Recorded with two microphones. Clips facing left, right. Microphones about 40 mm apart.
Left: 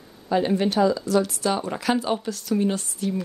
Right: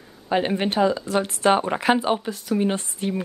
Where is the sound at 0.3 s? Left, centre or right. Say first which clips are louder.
Even; right.